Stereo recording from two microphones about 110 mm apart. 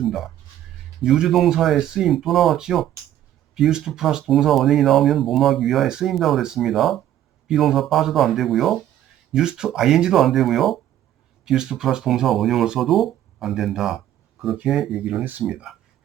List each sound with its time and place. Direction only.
0.0 s a sound: 5° right (ahead or behind)
1.0 s speech: 5° right (ahead or behind)
15.2 s speech: 15° right (ahead or behind)